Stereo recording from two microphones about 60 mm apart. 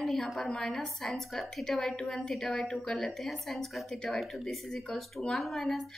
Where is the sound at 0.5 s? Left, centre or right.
Centre.